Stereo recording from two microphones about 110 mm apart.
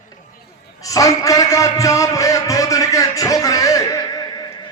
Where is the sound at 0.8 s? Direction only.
30° left (ahead or behind).